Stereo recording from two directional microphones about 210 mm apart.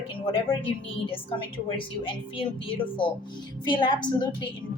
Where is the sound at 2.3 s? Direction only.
25° left (ahead or behind).